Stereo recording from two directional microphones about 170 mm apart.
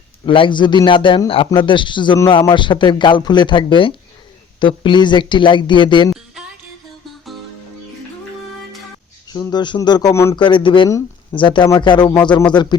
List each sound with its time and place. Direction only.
0.3 s speech: 30° left (ahead or behind)
9.3 s speech: 25° left (ahead or behind)
10.3 s speech: 30° left (ahead or behind)
10.8 s speech: 20° left (ahead or behind)
11.3 s speech: 30° left (ahead or behind)